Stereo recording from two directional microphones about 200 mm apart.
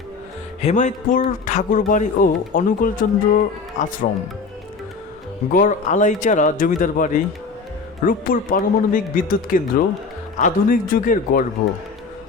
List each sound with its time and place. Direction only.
0.6 s speech: 35° left (ahead or behind)
5.5 s speech: 40° left (ahead or behind)